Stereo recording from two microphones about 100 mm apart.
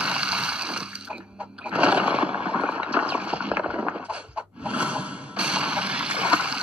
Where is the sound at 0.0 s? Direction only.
10° right (ahead or behind).